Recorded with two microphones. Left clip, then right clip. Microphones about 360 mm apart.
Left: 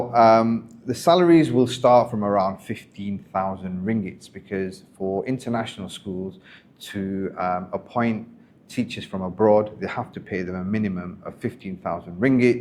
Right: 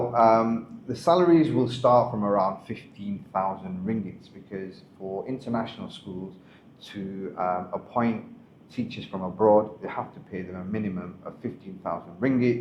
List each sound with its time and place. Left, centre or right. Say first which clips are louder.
0.1 s speech: left 5 dB; left